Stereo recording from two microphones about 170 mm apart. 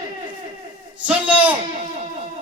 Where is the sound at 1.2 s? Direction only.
10° right (ahead or behind).